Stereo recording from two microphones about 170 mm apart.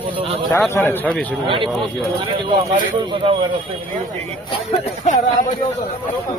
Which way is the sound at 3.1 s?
30° right (ahead or behind).